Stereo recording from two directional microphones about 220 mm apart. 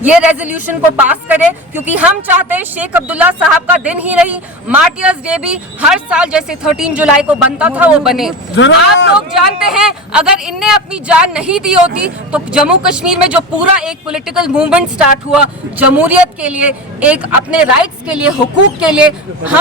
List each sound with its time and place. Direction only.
0.0 s speech: 5° right (ahead or behind)
8.5 s speech: 55° left (ahead or behind)
9.1 s speech: 5° right (ahead or behind)